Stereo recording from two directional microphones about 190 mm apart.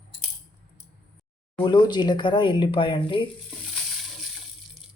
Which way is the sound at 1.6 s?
25° left (ahead or behind).